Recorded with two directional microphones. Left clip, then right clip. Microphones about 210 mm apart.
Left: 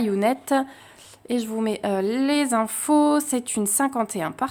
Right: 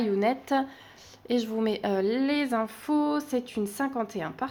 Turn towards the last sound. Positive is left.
turn(degrees=25)  # may be behind; listen again after turning